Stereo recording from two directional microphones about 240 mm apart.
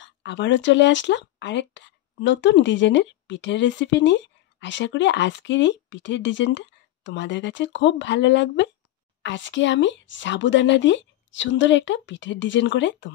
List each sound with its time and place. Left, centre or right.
0.0 s speech: left